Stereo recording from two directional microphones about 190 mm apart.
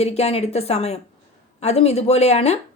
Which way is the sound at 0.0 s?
35° left (ahead or behind).